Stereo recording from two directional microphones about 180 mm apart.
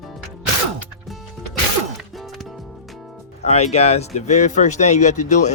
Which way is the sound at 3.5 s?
35° left (ahead or behind).